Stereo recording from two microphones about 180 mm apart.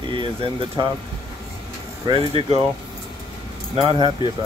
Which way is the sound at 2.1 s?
30° right (ahead or behind).